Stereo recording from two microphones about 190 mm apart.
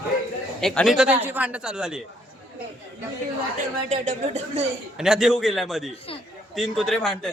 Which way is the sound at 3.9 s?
40° right (ahead or behind).